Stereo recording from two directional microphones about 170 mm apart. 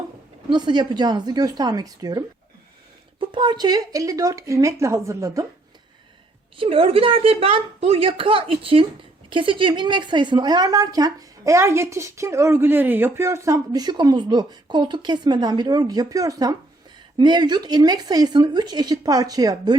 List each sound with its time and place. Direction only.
0.5 s a woman's voice: 25° right (ahead or behind)
6.6 s a woman's voice: 35° right (ahead or behind)